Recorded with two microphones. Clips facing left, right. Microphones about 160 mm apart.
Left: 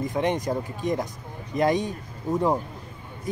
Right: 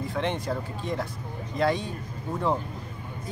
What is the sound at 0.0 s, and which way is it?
Speech, 15° left (ahead or behind).